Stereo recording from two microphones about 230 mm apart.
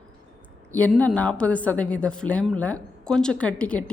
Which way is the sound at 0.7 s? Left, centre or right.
Centre.